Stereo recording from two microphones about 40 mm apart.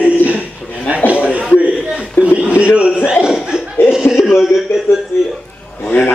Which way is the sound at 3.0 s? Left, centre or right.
Centre.